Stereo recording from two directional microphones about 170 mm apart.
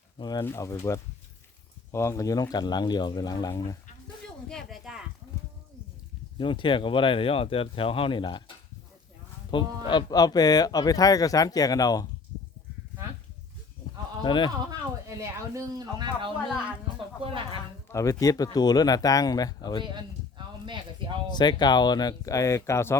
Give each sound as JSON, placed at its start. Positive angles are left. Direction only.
{"t": 0.2, "sound": "speech", "side_deg": 25}
{"t": 4.4, "sound": "speech", "side_deg": 0}
{"t": 6.4, "sound": "speech", "side_deg": 30}
{"t": 14.3, "sound": "speech", "side_deg": 25}
{"t": 15.2, "sound": "a woman's voice", "side_deg": -20}
{"t": 17.8, "sound": "speech", "side_deg": 20}
{"t": 19.8, "sound": "speech", "side_deg": -25}
{"t": 21.3, "sound": "speech", "side_deg": 25}